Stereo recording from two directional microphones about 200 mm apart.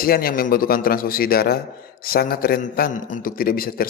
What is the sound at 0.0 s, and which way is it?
A man's voice, 50° left (ahead or behind).